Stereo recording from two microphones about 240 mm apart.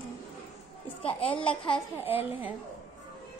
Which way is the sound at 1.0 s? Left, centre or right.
Left.